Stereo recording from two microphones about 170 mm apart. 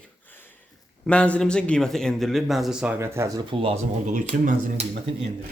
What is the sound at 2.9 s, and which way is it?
Speech, 15° right (ahead or behind).